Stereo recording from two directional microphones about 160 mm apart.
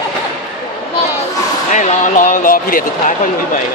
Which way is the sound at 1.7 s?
50° left (ahead or behind).